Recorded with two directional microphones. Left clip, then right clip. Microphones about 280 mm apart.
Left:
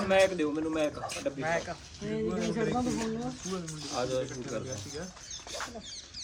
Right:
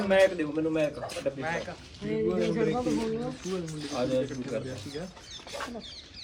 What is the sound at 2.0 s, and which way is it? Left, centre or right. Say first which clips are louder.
Speech: right 5 dB; left.